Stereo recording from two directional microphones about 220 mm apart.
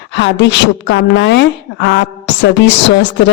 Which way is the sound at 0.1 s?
55° left (ahead or behind).